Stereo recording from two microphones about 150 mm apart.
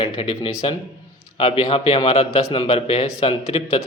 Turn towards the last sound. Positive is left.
turn(degrees=40)  # may be behind; listen again after turning